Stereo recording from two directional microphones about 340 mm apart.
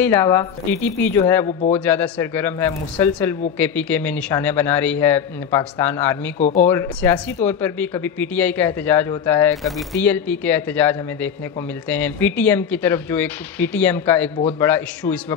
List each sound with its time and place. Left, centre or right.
0.0 s speech: centre